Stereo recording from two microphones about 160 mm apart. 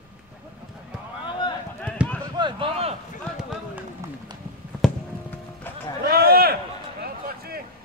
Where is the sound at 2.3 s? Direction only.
30° right (ahead or behind).